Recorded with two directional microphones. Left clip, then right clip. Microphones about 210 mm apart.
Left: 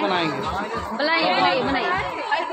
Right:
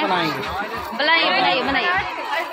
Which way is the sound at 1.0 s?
5° left (ahead or behind).